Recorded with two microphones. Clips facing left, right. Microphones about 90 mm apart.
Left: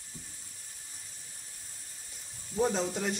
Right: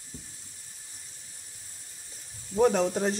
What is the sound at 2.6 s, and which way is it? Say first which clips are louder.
Speech: right 6 dB; 65° right (ahead or behind).